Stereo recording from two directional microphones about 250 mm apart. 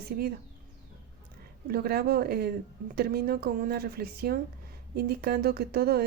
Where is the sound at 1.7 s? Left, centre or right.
Right.